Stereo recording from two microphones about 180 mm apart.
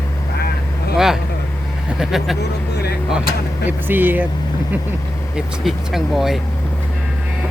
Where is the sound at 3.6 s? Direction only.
10° right (ahead or behind).